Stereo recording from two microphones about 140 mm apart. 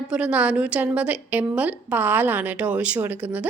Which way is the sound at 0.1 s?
5° right (ahead or behind).